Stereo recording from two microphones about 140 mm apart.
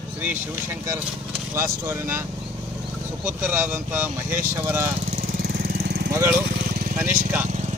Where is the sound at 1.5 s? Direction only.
15° right (ahead or behind).